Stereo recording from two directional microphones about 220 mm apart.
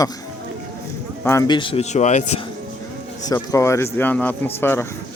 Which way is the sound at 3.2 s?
15° left (ahead or behind).